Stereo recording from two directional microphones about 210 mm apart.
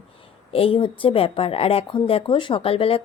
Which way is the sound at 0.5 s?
25° left (ahead or behind).